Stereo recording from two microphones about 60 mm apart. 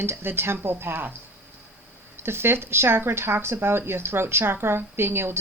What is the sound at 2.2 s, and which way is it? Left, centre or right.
Speech, right.